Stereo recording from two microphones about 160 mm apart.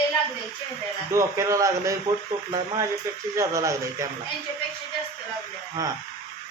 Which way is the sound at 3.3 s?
20° right (ahead or behind).